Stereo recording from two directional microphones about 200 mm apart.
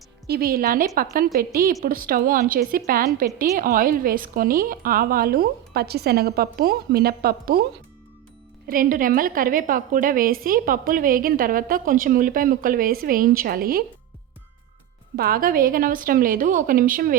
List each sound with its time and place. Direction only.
0.3 s a woman's voice: 50° right (ahead or behind)
8.6 s a woman's voice: 45° right (ahead or behind)
15.1 s a woman's voice: 50° right (ahead or behind)